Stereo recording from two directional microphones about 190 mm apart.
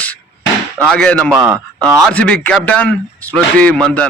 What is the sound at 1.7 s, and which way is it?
Speech, 15° right (ahead or behind).